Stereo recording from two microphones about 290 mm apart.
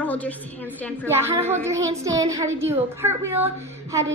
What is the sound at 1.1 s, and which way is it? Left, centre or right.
A woman's voice, centre.